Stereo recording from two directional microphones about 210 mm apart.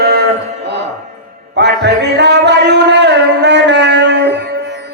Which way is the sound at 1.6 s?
55° right (ahead or behind).